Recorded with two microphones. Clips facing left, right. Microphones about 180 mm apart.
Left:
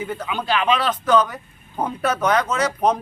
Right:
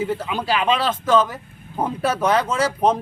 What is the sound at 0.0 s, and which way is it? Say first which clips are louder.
A man's voice: right 3 dB; 30° right (ahead or behind).